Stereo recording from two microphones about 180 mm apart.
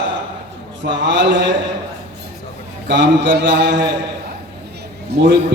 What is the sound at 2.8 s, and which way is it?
Speech, 80° right.